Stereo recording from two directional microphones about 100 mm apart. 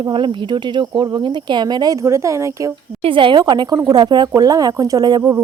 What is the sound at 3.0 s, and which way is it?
A woman's voice, 60° right (ahead or behind).